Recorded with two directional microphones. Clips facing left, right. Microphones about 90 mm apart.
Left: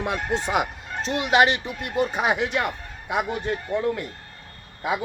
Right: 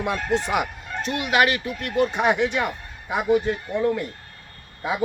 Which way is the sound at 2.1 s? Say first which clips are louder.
Right 2 dB; 5° left (ahead or behind).